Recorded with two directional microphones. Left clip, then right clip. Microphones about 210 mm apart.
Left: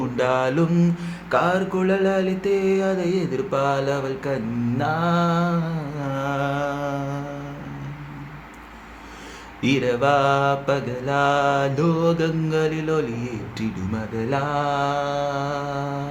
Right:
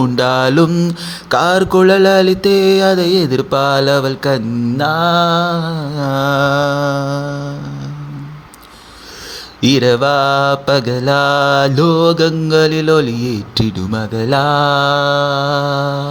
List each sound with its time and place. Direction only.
0.2 s mantra: 45° right (ahead or behind)
9.6 s mantra: 40° right (ahead or behind)